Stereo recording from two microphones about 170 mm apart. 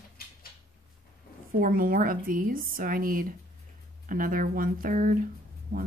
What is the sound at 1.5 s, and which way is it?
Speech, 55° right (ahead or behind).